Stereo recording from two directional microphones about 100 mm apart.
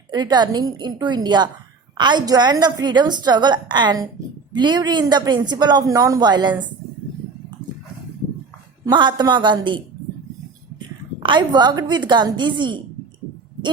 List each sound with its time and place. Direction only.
0.1 s a woman's voice: 45° right (ahead or behind)
8.9 s a woman's voice: 50° right (ahead or behind)